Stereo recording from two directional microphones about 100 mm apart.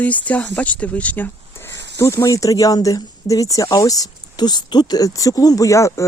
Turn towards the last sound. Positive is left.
turn(degrees=30)  # may be behind; listen again after turning